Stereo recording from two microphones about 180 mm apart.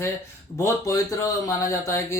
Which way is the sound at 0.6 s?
15° left (ahead or behind).